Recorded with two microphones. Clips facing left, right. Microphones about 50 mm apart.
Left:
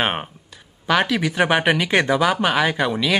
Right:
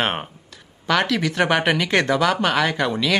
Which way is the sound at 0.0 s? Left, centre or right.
Centre.